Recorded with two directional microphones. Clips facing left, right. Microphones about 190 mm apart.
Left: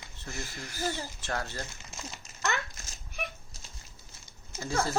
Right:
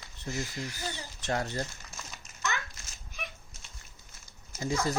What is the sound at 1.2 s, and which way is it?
Speech, 20° right (ahead or behind).